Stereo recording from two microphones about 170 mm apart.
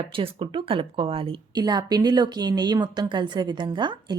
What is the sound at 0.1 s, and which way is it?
A woman's voice, 30° right (ahead or behind).